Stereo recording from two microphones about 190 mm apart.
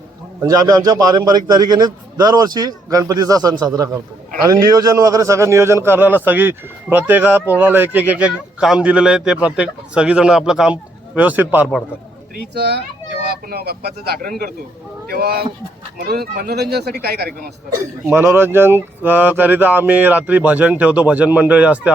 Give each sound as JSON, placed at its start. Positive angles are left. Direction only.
{"t": 0.4, "sound": "a man's voice", "side_deg": -20}
{"t": 12.5, "sound": "speech", "side_deg": -60}
{"t": 18.0, "sound": "a man's voice", "side_deg": -10}